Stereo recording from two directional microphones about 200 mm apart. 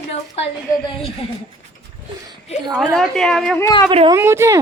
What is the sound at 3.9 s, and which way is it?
Speech, 25° right (ahead or behind).